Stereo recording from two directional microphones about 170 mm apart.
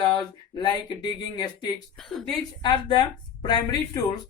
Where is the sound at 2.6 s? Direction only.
30° left (ahead or behind).